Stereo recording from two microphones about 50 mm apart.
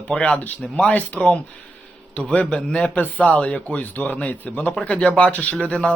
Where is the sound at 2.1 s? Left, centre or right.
Left.